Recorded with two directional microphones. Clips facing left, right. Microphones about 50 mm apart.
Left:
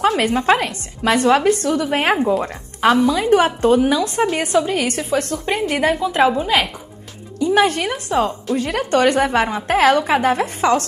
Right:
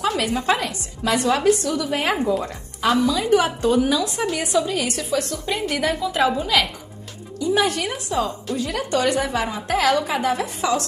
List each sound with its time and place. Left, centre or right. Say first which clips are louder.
0.0 s a woman's voice: left 5 dB; left